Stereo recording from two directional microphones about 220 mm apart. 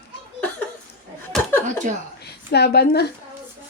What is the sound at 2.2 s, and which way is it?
Speech, 45° left (ahead or behind).